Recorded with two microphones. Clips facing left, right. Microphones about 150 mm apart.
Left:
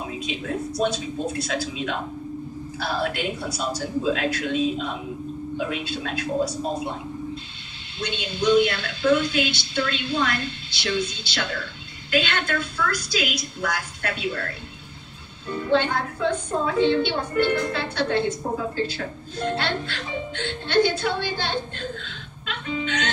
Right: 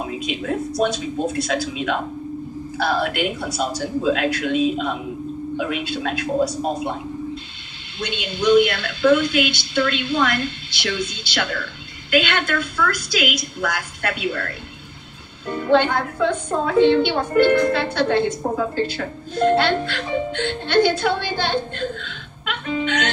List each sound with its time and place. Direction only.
0.0 s a woman's voice: 60° right (ahead or behind)
5.6 s a woman's voice: 65° right (ahead or behind)
8.0 s a woman's voice: 65° right (ahead or behind)